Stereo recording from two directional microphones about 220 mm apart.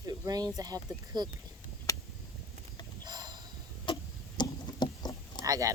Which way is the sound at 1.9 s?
15° left (ahead or behind).